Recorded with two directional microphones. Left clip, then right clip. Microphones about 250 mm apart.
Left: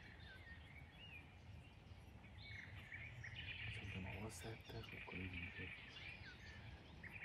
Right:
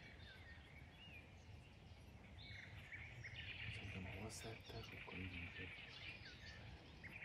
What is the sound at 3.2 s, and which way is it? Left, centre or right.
Bird, centre.